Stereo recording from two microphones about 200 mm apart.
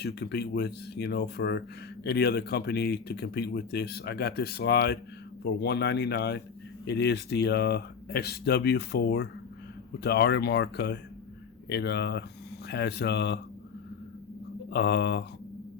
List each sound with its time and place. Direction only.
0.0 s speech: 55° left (ahead or behind)
14.7 s speech: 55° left (ahead or behind)